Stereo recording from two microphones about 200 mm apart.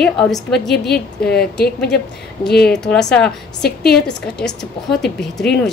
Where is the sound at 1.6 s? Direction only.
55° left (ahead or behind).